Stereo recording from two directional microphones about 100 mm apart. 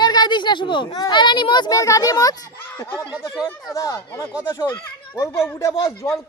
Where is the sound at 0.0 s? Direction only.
45° left (ahead or behind).